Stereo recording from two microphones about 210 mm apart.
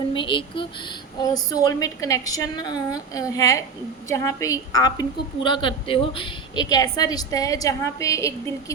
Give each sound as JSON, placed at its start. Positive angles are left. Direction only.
{"t": 0.1, "sound": "a woman's voice", "side_deg": 25}